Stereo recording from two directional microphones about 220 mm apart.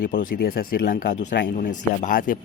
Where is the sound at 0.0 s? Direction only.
45° left (ahead or behind).